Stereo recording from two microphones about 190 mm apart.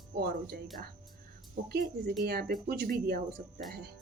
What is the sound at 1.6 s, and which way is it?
A woman's voice, 45° right (ahead or behind).